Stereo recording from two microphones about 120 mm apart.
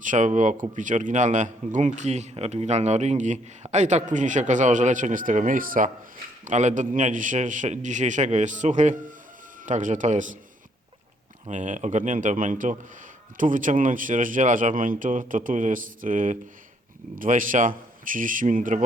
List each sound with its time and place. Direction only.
0.0 s speech: 90° right
11.4 s speech: 90° right